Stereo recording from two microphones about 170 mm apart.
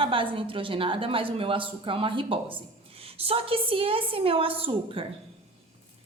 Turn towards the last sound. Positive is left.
turn(degrees=-35)  # may be behind; listen again after turning